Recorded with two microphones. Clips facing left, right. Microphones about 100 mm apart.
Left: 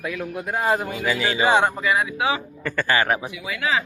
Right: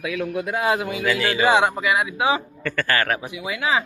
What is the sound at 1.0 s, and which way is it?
Speech, 10° left (ahead or behind).